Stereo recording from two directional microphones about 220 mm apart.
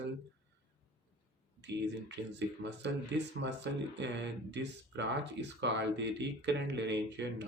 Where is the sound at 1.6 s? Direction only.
50° right (ahead or behind).